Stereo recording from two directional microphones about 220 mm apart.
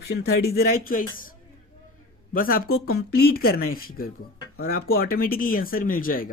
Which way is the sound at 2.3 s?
40° left (ahead or behind).